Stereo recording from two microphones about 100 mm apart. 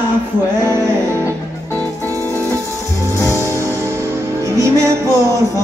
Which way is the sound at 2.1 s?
30° right (ahead or behind).